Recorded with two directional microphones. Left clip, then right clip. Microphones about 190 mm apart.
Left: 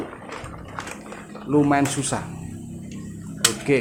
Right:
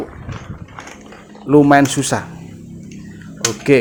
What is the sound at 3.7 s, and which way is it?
Speech, 25° right (ahead or behind).